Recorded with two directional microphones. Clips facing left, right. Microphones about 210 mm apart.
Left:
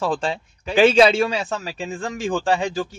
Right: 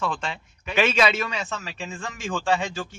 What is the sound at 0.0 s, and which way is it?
A man's voice, 35° left (ahead or behind).